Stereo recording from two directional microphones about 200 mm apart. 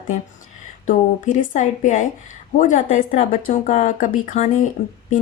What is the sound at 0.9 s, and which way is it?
Speech, 40° left (ahead or behind).